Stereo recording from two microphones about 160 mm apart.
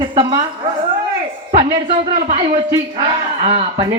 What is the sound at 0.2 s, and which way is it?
Speech, 30° right (ahead or behind).